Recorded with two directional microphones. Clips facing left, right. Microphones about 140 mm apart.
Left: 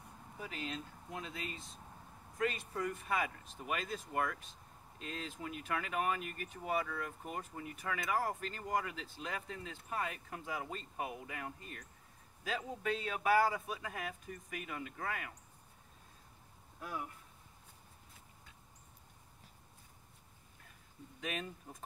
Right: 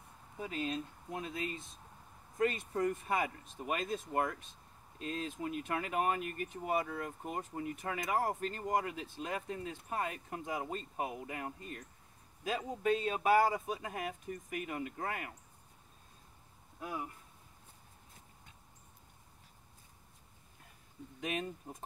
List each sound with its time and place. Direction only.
0.4 s speech: 25° right (ahead or behind)
2.3 s speech: 25° right (ahead or behind)
21.2 s speech: 25° right (ahead or behind)